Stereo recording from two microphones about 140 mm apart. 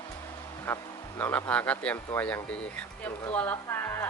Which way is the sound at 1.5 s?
10° left (ahead or behind).